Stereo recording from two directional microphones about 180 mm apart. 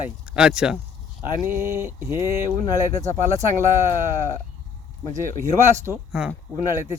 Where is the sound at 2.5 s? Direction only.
40° right (ahead or behind).